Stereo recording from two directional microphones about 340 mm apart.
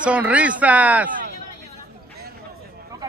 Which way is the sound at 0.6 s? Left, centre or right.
Centre.